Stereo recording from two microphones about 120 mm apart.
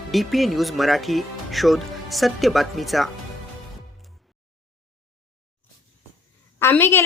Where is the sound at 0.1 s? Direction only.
Centre (ahead or behind).